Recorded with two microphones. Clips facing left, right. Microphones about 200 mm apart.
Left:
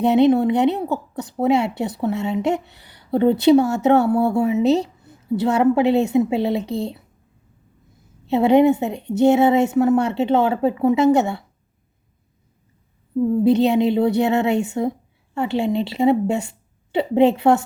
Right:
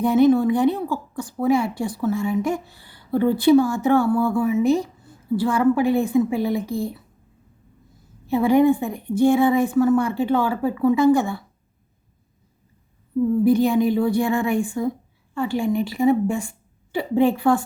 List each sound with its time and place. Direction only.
0.6 s a woman's voice: 20° left (ahead or behind)
4.6 s speech: 70° left (ahead or behind)
5.0 s a woman's voice: 20° left (ahead or behind)
6.6 s speech: 70° left (ahead or behind)
8.3 s a woman's voice: 25° left (ahead or behind)
13.4 s speech: 70° left (ahead or behind)
13.7 s a woman's voice: 25° left (ahead or behind)